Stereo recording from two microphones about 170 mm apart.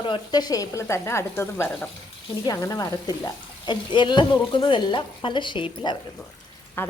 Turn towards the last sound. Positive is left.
turn(degrees=10)  # may be behind; listen again after turning